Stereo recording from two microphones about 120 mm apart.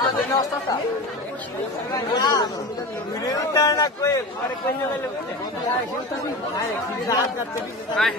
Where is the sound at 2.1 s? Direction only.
35° left (ahead or behind).